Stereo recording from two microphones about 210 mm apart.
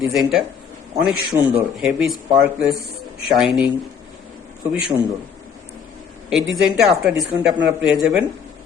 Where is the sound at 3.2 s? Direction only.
Centre (ahead or behind).